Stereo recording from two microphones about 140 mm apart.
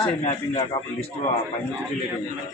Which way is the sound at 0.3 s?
40° left (ahead or behind).